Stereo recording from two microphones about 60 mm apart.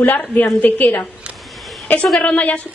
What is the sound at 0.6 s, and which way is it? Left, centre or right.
Speech, left.